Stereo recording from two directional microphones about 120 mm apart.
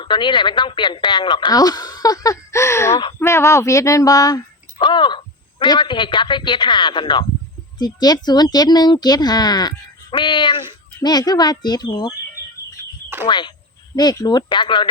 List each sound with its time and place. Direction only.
0.0 s speech: 40° left (ahead or behind)
13.2 s speech: 40° left (ahead or behind)